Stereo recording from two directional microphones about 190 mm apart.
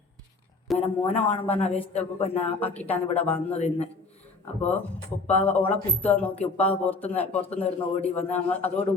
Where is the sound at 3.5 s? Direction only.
35° left (ahead or behind).